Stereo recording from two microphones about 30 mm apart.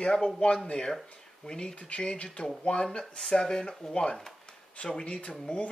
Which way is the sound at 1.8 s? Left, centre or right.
Left.